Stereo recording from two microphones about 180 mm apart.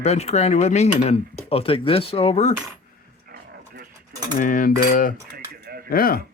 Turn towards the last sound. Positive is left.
turn(degrees=55)  # may be behind; listen again after turning